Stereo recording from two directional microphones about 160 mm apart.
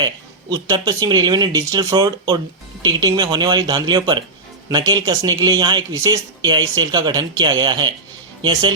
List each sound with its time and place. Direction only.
0.5 s speech: 25° right (ahead or behind)